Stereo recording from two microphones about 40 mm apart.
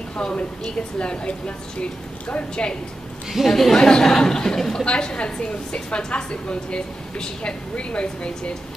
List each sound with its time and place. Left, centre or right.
0.2 s a woman's voice: left
3.3 s speech: centre
3.7 s speech: centre
4.8 s a woman's voice: left